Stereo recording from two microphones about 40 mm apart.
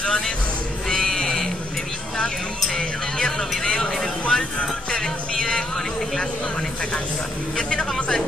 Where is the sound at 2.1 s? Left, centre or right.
Centre.